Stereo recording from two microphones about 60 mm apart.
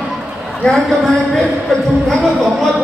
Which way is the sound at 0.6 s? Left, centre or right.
Centre.